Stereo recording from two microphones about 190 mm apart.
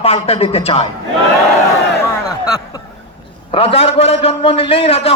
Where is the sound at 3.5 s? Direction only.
30° left (ahead or behind).